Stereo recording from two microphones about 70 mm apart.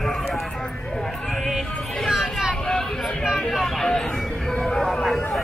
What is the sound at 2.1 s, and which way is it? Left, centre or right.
Vehicle, centre.